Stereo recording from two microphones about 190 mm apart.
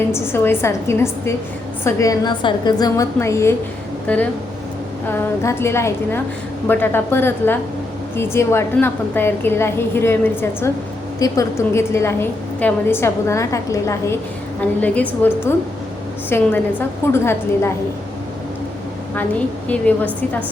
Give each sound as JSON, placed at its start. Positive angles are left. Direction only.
{"t": 0.1, "sound": "a woman's voice", "side_deg": 10}
{"t": 19.6, "sound": "a woman's voice", "side_deg": 10}